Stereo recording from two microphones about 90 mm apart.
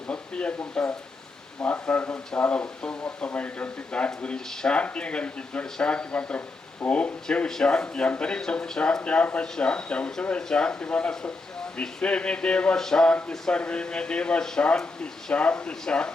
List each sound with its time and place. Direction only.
0.1 s speech: 10° left (ahead or behind)